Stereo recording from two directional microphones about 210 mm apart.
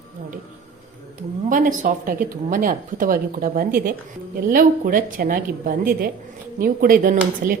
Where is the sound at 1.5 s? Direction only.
40° right (ahead or behind).